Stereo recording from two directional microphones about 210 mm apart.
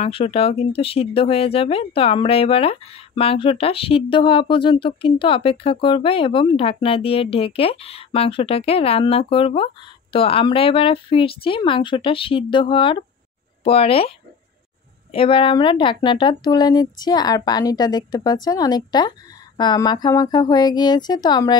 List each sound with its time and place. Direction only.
0.0 s speech: 30° left (ahead or behind)